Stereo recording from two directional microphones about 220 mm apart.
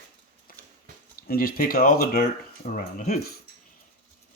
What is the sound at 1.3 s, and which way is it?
Speech, 40° left (ahead or behind).